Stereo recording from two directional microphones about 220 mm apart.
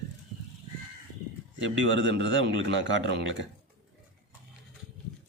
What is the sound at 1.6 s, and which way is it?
A man's voice, 55° right (ahead or behind).